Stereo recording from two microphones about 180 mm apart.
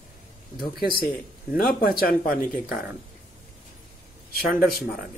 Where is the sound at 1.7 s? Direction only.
55° left (ahead or behind).